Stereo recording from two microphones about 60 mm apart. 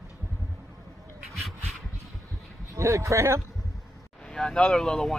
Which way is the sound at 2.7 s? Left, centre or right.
Right.